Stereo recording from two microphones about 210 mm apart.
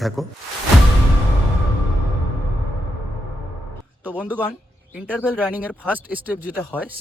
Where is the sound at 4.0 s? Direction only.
10° right (ahead or behind).